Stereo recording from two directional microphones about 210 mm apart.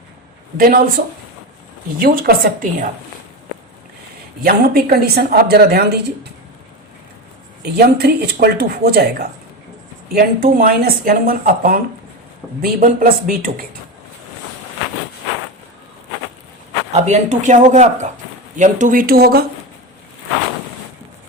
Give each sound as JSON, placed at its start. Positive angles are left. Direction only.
{"t": 0.5, "sound": "speech", "side_deg": -45}
{"t": 4.4, "sound": "speech", "side_deg": -45}
{"t": 7.6, "sound": "speech", "side_deg": -50}
{"t": 16.9, "sound": "speech", "side_deg": -35}